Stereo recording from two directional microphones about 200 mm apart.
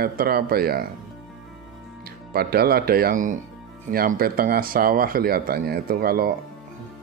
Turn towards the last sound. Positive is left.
turn(degrees=-50)  # may be behind; listen again after turning